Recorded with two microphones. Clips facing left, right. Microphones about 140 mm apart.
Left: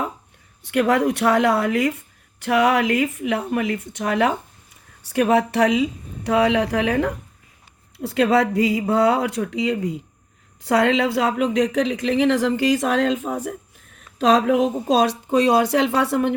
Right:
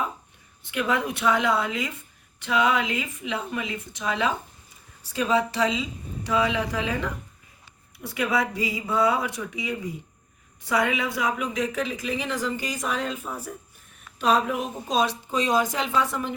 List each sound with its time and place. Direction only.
0.6 s a woman's voice: 75° left (ahead or behind)